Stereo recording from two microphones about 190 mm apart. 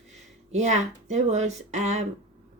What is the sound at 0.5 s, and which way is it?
A woman's voice, 35° right (ahead or behind).